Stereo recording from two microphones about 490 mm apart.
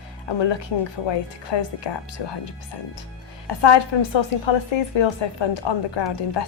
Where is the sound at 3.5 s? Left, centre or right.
Left.